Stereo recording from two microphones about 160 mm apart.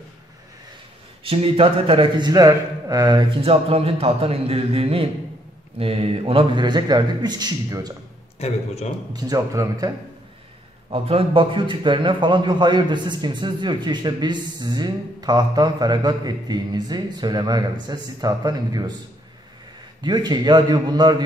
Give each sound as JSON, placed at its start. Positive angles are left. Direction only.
{"t": 1.2, "sound": "a man's voice", "side_deg": -35}
{"t": 3.4, "sound": "a man's voice", "side_deg": -35}
{"t": 8.4, "sound": "a man's voice", "side_deg": 40}
{"t": 9.1, "sound": "a man's voice", "side_deg": -20}
{"t": 10.9, "sound": "a man's voice", "side_deg": -35}
{"t": 20.0, "sound": "a man's voice", "side_deg": -25}